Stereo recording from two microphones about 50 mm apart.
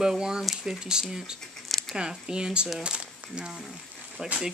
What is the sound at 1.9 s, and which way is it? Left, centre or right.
Speech, centre.